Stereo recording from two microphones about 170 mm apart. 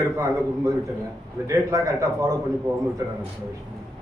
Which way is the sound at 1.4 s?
20° right (ahead or behind).